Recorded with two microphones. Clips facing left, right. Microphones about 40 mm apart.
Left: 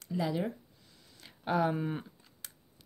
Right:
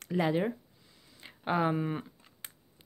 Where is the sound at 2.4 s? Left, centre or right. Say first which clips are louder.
Right 3 dB; right.